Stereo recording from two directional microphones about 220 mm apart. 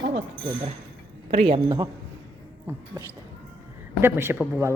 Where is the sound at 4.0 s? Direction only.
10° right (ahead or behind).